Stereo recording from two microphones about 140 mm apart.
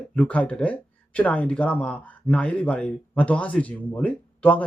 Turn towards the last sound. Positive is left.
turn(degrees=10)  # may be behind; listen again after turning